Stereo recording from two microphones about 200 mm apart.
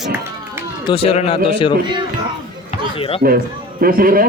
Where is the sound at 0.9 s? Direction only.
30° left (ahead or behind).